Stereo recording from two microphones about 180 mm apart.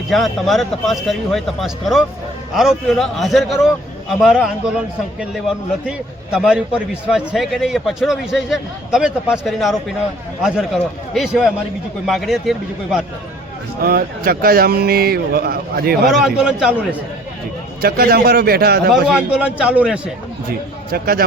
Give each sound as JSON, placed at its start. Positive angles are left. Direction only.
{"t": 0.1, "sound": "a man's voice", "side_deg": 0}
{"t": 6.3, "sound": "a man's voice", "side_deg": -5}
{"t": 13.8, "sound": "speech", "side_deg": -55}
{"t": 16.1, "sound": "a man's voice", "side_deg": -5}
{"t": 17.8, "sound": "speech", "side_deg": -60}
{"t": 19.0, "sound": "a man's voice", "side_deg": -5}
{"t": 20.9, "sound": "speech", "side_deg": -55}